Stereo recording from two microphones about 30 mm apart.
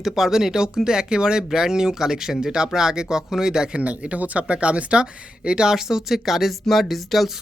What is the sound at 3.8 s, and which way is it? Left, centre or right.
Speech, right.